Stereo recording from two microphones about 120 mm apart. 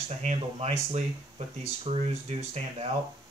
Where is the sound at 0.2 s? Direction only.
70° right (ahead or behind).